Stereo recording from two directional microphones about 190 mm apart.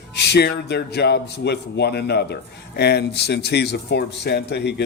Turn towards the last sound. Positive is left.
turn(degrees=60)  # may be behind; listen again after turning